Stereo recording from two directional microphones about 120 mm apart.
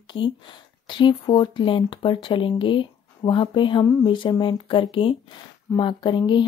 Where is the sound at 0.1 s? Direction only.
45° left (ahead or behind).